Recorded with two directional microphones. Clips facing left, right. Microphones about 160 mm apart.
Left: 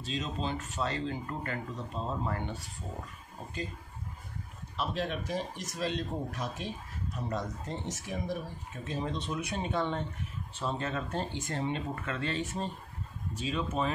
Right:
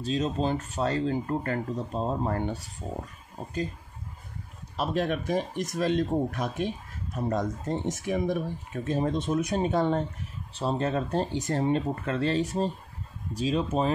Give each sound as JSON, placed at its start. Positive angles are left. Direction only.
{"t": 0.0, "sound": "speech", "side_deg": -40}
{"t": 4.7, "sound": "speech", "side_deg": -50}